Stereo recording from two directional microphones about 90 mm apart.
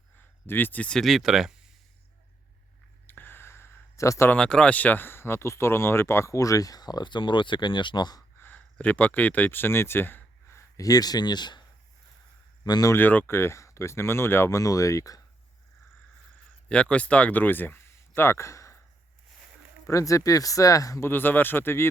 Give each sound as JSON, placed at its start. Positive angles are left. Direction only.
{"t": 0.4, "sound": "speech", "side_deg": 25}
{"t": 1.0, "sound": "speech", "side_deg": -5}
{"t": 3.1, "sound": "a sound", "side_deg": 25}
{"t": 4.3, "sound": "speech", "side_deg": 10}
{"t": 8.4, "sound": "speech", "side_deg": 20}
{"t": 12.6, "sound": "speech", "side_deg": 50}
{"t": 12.9, "sound": "speech", "side_deg": 20}
{"t": 16.6, "sound": "speech", "side_deg": 10}
{"t": 19.9, "sound": "speech", "side_deg": 35}
{"t": 21.0, "sound": "speech", "side_deg": 25}